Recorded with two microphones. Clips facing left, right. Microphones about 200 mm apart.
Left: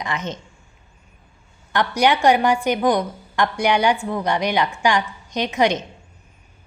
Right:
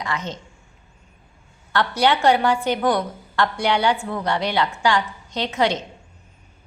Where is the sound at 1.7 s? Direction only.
15° left (ahead or behind).